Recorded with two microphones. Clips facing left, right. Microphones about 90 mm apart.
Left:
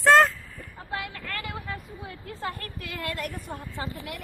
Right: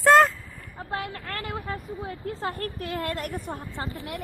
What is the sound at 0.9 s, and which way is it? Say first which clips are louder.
Vehicle: right 2 dB; 50° right (ahead or behind).